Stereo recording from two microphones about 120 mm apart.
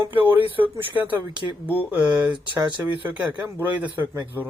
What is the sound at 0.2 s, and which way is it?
Speech, 15° right (ahead or behind).